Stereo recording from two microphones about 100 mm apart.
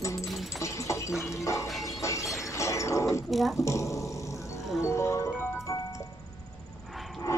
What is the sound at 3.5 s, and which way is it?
Dog, 30° left (ahead or behind).